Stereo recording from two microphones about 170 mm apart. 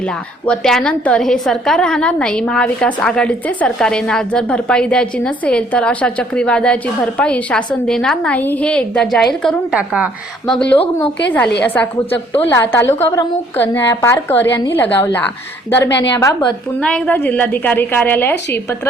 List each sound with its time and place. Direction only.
0.0 s a woman's voice: 5° left (ahead or behind)
10.5 s a woman's voice: 5° left (ahead or behind)
16.2 s a woman's voice: 25° left (ahead or behind)
16.8 s a woman's voice: 5° left (ahead or behind)